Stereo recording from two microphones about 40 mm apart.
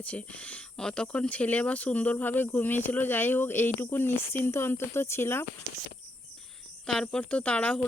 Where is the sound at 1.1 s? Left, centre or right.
Left.